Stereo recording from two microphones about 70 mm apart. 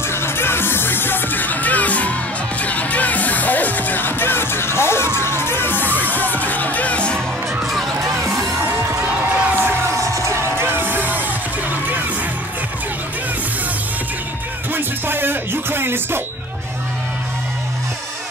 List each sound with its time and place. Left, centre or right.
0.1 s music: left; by 7.2 s centre
7.6 s music: centre
8.0 s music: right
10.1 s music: right
14.7 s music: right